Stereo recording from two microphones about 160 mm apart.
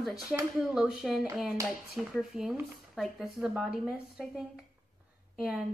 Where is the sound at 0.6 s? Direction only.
5° right (ahead or behind).